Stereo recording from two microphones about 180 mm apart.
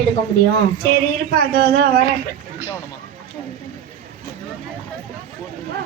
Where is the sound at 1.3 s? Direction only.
60° right (ahead or behind).